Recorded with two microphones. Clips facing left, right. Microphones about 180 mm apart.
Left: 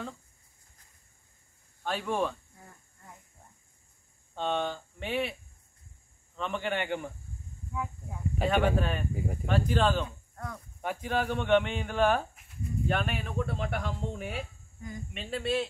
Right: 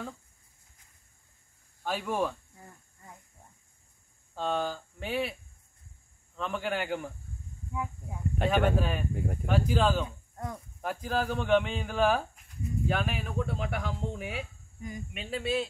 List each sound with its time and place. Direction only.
1.8 s speech: 5° right (ahead or behind)
4.4 s speech: 5° right (ahead or behind)
6.3 s speech: centre (ahead or behind)
7.7 s speech: 15° right (ahead or behind)
8.4 s speech: centre (ahead or behind)
10.0 s speech: 15° right (ahead or behind)
10.8 s speech: centre (ahead or behind)
14.8 s speech: 15° right (ahead or behind)
15.1 s speech: centre (ahead or behind)